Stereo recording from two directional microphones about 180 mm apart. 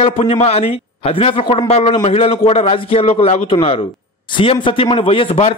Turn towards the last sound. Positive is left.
turn(degrees=30)  # may be behind; listen again after turning